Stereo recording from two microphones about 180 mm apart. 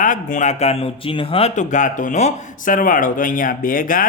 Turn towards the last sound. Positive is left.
turn(degrees=50)  # may be behind; listen again after turning